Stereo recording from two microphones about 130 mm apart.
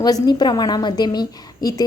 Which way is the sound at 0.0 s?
30° left (ahead or behind).